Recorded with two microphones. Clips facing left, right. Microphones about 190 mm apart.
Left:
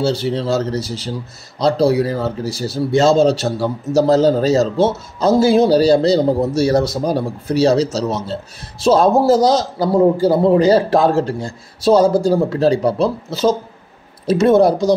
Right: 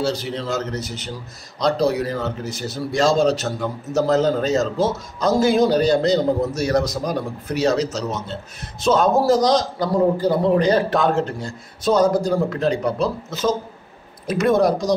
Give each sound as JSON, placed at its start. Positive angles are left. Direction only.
{"t": 0.0, "sound": "a man's voice", "side_deg": 30}
{"t": 9.4, "sound": "a man's voice", "side_deg": 5}
{"t": 9.8, "sound": "a man's voice", "side_deg": 30}